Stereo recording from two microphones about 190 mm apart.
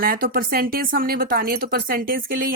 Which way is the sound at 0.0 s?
50° right (ahead or behind).